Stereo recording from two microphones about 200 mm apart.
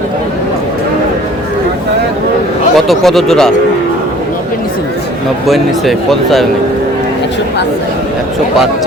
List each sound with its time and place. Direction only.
2.7 s speech: centre (ahead or behind)
5.5 s speech: centre (ahead or behind)